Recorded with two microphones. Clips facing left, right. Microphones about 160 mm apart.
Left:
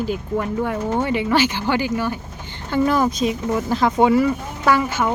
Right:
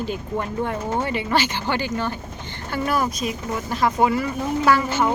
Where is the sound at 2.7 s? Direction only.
20° left (ahead or behind).